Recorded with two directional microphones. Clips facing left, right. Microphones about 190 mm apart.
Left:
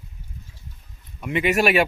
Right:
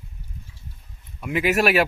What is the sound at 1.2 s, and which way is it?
Speech, 5° right (ahead or behind).